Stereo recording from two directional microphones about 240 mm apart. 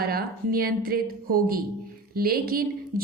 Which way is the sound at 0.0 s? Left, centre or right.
Right.